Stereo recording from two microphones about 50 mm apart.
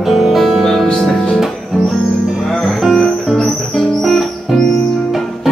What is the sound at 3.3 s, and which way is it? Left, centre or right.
Music, centre.